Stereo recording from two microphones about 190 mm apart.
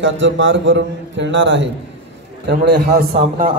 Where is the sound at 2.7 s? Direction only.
60° right (ahead or behind).